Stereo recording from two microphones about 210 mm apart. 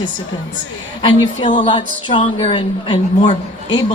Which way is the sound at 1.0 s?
20° left (ahead or behind).